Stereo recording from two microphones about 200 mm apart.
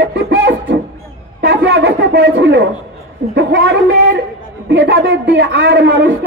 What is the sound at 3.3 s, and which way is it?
Speech, 65° right (ahead or behind).